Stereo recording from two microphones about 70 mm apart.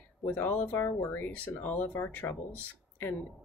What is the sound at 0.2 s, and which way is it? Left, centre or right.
Speech, left.